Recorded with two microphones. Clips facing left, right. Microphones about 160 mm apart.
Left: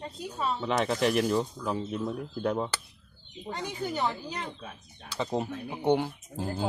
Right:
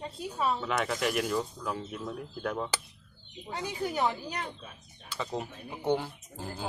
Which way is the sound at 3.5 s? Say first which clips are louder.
Even; 5° right (ahead or behind).